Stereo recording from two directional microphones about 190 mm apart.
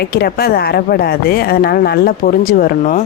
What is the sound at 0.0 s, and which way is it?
Speech, 55° left (ahead or behind).